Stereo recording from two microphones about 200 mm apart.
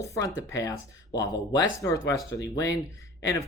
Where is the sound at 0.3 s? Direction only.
15° left (ahead or behind).